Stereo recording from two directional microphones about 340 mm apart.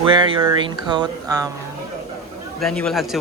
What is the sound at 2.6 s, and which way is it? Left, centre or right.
Speech, centre.